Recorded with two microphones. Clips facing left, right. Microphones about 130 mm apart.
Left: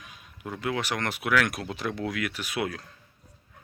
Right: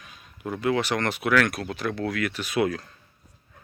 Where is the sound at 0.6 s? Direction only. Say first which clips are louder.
Right 5 dB; 5° left (ahead or behind).